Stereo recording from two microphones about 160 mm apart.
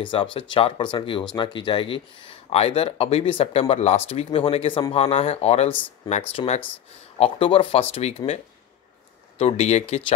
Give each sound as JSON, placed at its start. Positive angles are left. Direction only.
{"t": 0.0, "sound": "speech", "side_deg": 30}
{"t": 5.7, "sound": "speech", "side_deg": 10}
{"t": 6.3, "sound": "speech", "side_deg": 40}
{"t": 9.4, "sound": "speech", "side_deg": 40}